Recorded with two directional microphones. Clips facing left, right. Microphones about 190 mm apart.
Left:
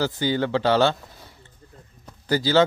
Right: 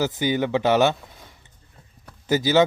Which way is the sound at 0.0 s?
20° right (ahead or behind).